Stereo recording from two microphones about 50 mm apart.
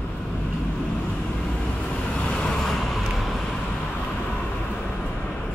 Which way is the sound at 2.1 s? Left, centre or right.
Centre.